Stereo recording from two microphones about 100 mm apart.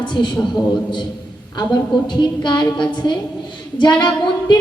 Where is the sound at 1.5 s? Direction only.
45° left (ahead or behind).